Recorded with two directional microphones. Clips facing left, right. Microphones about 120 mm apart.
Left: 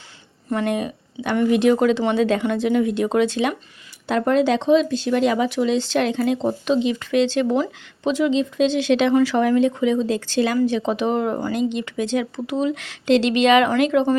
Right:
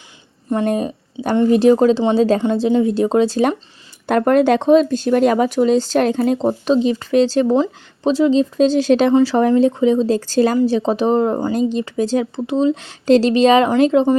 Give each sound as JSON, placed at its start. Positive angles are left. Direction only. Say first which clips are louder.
{"t": 0.5, "sound": "speech", "louder": "right 4 dB", "side_deg": -30}
{"t": 4.0, "sound": "speech", "louder": "right 5 dB", "side_deg": -55}